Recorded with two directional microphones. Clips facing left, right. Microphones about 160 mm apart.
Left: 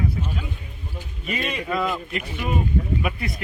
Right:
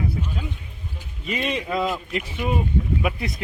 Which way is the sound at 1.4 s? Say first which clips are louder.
Right 1 dB; 20° right (ahead or behind).